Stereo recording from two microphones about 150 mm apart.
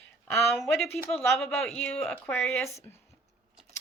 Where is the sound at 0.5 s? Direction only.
5° left (ahead or behind).